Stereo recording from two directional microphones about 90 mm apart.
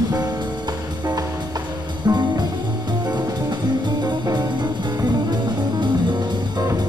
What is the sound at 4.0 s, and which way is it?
Music, 50° right (ahead or behind).